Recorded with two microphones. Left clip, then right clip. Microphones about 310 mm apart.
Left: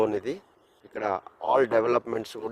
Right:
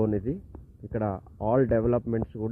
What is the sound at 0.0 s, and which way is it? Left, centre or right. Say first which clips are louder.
Speech: left 2 dB; left.